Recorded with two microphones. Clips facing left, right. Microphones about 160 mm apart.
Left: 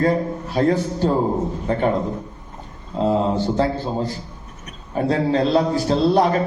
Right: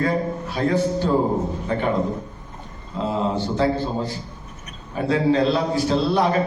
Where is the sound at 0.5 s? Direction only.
35° left (ahead or behind).